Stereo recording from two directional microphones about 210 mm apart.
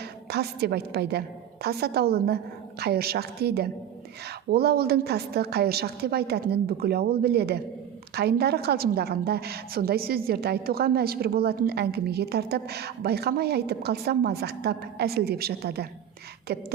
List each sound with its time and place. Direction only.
0.0 s a woman's voice: 50° right (ahead or behind)